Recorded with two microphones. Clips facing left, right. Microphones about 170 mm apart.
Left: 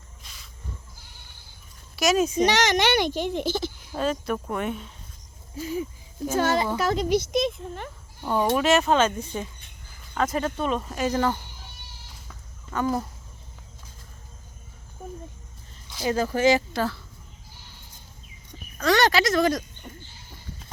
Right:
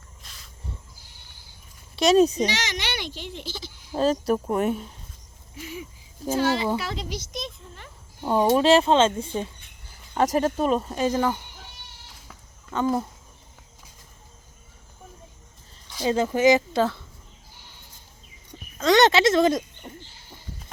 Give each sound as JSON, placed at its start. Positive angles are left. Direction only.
{"t": 0.2, "sound": "a sound", "side_deg": 0}
{"t": 2.0, "sound": "speech", "side_deg": -30}
{"t": 2.4, "sound": "a child's voice", "side_deg": 55}
{"t": 3.9, "sound": "speech", "side_deg": -35}
{"t": 5.5, "sound": "a sound", "side_deg": 40}
{"t": 6.3, "sound": "a child's voice", "side_deg": 45}
{"t": 8.2, "sound": "speech", "side_deg": -25}
{"t": 10.2, "sound": "speech", "side_deg": -40}
{"t": 11.1, "sound": "speech", "side_deg": -10}
{"t": 16.0, "sound": "speech", "side_deg": -25}
{"t": 18.8, "sound": "speech", "side_deg": -20}